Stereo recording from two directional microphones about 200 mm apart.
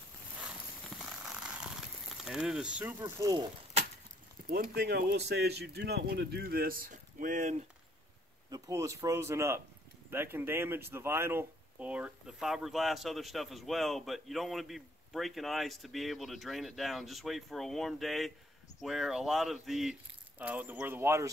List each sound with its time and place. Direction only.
2.2 s speech: 5° right (ahead or behind); by 3.4 s 20° right (ahead or behind)
4.5 s speech: 50° right (ahead or behind)
8.5 s speech: 15° right (ahead or behind)